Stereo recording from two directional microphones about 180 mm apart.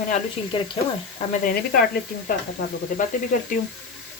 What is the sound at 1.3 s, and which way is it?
Speech, 50° left (ahead or behind).